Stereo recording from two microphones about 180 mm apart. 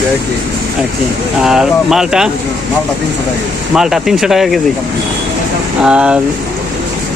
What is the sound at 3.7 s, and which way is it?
Speech, centre (ahead or behind).